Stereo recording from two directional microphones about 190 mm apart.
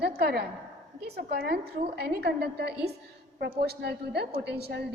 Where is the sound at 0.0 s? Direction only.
60° right (ahead or behind).